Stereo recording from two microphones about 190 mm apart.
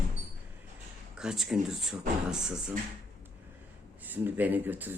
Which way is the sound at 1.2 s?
Centre (ahead or behind).